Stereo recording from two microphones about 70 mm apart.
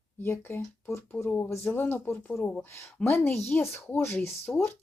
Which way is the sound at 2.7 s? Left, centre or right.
Left.